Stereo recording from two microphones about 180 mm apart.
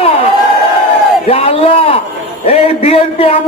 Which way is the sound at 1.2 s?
35° left (ahead or behind).